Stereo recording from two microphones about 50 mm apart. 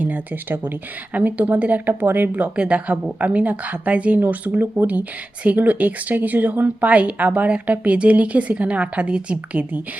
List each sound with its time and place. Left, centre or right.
0.0 s speech: right
1.9 s speech: right
2.6 s speech: right